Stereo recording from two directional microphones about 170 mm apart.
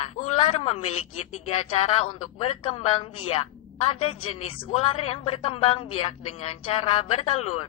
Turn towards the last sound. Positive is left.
turn(degrees=40)  # may be behind; listen again after turning